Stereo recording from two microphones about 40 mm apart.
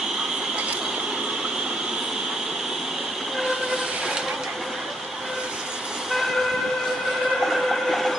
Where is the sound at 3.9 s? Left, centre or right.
Centre.